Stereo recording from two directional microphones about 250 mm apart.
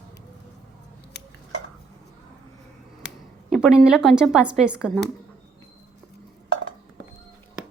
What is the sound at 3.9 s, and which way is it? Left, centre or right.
Speech, centre.